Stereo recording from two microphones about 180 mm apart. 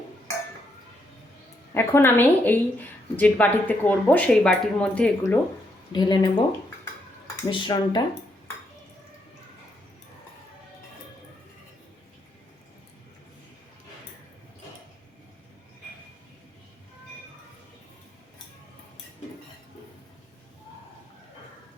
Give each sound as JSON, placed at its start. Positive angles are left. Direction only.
{"t": 1.7, "sound": "a woman's voice", "side_deg": 15}
{"t": 5.9, "sound": "speech", "side_deg": 25}
{"t": 7.4, "sound": "speech", "side_deg": 25}